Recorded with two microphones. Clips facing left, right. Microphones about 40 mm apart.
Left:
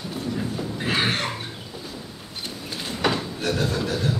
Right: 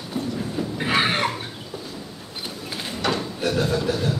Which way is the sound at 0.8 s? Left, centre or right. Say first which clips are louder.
Right 3 dB; centre.